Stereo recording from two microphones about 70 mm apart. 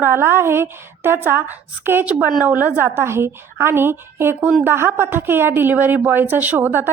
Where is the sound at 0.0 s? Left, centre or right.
Right.